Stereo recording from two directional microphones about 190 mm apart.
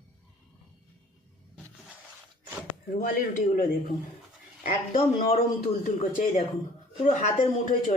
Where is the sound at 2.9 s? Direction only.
45° left (ahead or behind).